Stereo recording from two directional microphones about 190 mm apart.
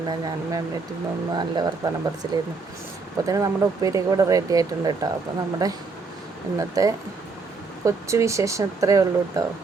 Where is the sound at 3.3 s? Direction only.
20° right (ahead or behind).